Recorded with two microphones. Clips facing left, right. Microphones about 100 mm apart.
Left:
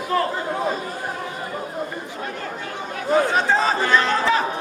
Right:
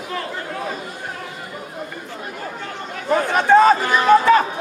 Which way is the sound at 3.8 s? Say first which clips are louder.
Right 5 dB; 15° right (ahead or behind).